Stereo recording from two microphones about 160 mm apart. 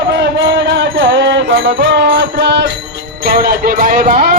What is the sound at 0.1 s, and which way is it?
Music, 90° right.